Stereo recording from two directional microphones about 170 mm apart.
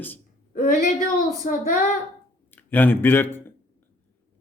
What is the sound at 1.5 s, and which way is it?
Child singing, 50° left (ahead or behind).